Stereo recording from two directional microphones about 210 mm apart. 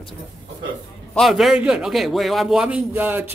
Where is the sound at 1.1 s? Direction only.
Centre (ahead or behind).